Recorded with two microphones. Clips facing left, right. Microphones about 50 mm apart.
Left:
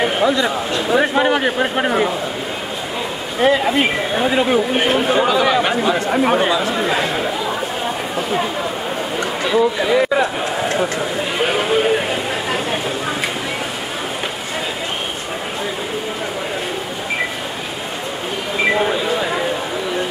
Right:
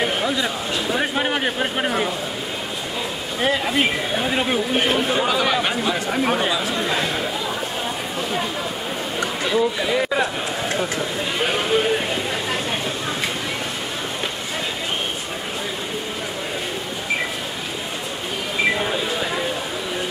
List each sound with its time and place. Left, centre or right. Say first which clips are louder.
0.0 s a sound: left 5 dB; centre
0.3 s speech: left 5 dB; centre
0.8 s speech: left 8 dB; centre
3.3 s speech: left 6 dB; centre
9.6 s speech: left 6 dB; centre
18.6 s a sound: left 4 dB; centre